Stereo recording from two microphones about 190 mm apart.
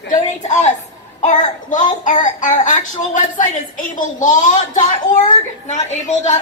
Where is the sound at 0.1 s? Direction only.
40° left (ahead or behind).